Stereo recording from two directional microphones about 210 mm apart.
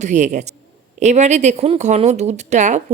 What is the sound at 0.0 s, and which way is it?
Speech, 35° right (ahead or behind).